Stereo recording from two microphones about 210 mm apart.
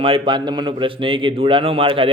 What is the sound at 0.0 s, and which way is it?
A man's voice, 25° right (ahead or behind).